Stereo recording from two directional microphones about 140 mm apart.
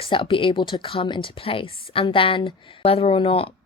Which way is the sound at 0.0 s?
40° left (ahead or behind).